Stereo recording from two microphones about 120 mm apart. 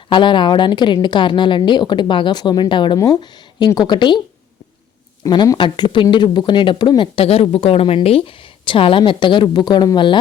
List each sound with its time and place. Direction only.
0.1 s a woman's voice: 40° left (ahead or behind)
5.2 s speech: 30° left (ahead or behind)